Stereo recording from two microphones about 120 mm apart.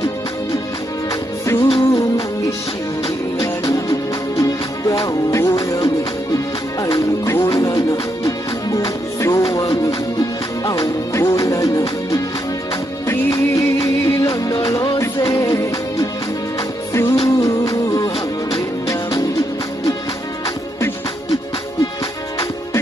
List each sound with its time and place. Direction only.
1.4 s music: 20° left (ahead or behind)
3.3 s music: 30° left (ahead or behind)